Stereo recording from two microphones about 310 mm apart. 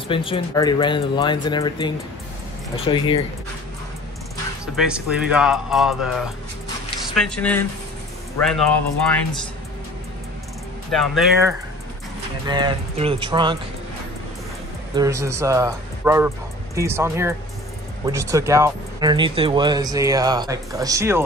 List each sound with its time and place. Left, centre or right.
0.1 s speech: centre
4.7 s speech: centre
10.9 s speech: centre
12.4 s speech: centre
15.0 s speech: centre